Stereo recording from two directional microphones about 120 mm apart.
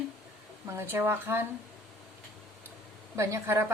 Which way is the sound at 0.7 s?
20° right (ahead or behind).